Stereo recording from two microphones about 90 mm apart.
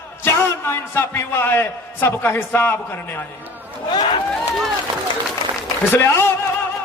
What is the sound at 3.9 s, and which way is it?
Speech, 55° left (ahead or behind).